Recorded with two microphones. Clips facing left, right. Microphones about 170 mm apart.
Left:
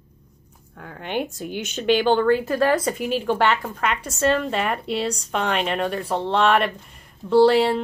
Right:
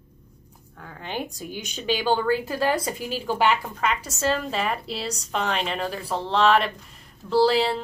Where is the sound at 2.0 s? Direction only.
10° right (ahead or behind).